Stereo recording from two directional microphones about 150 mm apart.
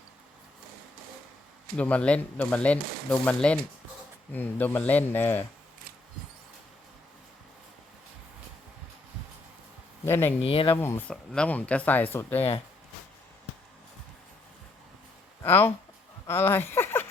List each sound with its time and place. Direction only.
1.7 s speech: 10° left (ahead or behind)
10.1 s speech: 15° left (ahead or behind)
10.4 s speech: 40° left (ahead or behind)
10.8 s speech: 15° left (ahead or behind)
15.4 s speech: 15° left (ahead or behind)